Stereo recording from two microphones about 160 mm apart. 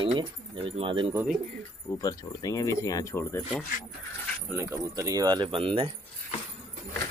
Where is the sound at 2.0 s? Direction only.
20° left (ahead or behind).